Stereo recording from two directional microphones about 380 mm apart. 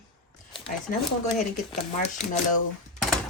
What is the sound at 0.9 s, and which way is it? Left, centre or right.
Speech, centre.